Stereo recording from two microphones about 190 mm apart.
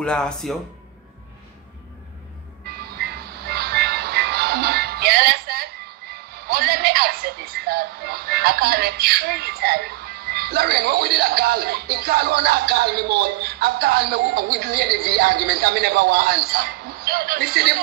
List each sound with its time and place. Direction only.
0.0 s speech: 5° left (ahead or behind)
2.6 s music: 55° right (ahead or behind)
6.3 s speech: 55° right (ahead or behind)